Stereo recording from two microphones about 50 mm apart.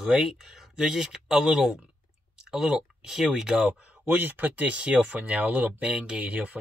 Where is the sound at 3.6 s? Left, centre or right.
Right.